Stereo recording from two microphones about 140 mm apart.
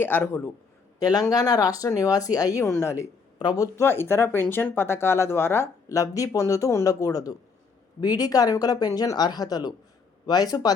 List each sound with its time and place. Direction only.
0.0 s speech: 15° left (ahead or behind)
0.9 s speech: 25° left (ahead or behind)